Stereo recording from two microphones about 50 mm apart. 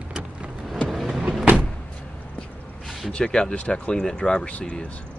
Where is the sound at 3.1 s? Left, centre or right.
Centre.